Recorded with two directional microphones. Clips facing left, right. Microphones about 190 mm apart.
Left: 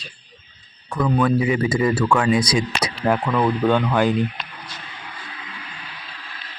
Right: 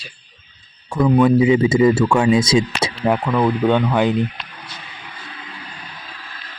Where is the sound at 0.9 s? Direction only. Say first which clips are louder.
Right 5 dB; 25° right (ahead or behind).